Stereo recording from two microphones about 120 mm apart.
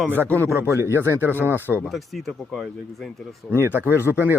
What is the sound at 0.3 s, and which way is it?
Speech, 20° right (ahead or behind).